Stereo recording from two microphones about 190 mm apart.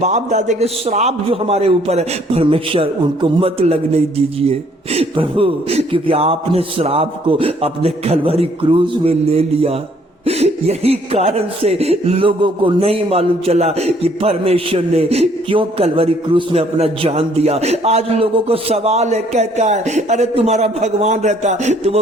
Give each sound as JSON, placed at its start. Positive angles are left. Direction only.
{"t": 0.0, "sound": "speech", "side_deg": -40}